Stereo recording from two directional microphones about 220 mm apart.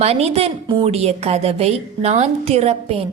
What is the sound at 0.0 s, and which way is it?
A woman's voice, 30° right (ahead or behind).